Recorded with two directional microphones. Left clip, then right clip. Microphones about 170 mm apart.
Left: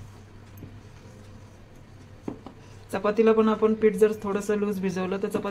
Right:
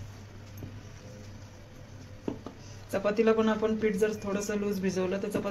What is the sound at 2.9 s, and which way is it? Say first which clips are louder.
Speech: left 4 dB; 65° left (ahead or behind).